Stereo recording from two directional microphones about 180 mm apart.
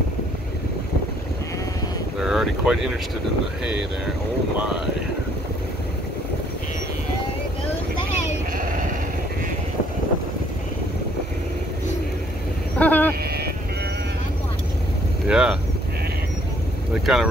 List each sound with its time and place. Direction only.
2.1 s boat: 5° right (ahead or behind)
8.5 s bleat: 45° right (ahead or behind)
12.7 s a sound: 10° left (ahead or behind)
15.2 s vehicle: 5° right (ahead or behind)
16.9 s speech: centre (ahead or behind)